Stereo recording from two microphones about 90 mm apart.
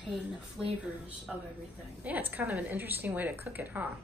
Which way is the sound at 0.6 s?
5° right (ahead or behind).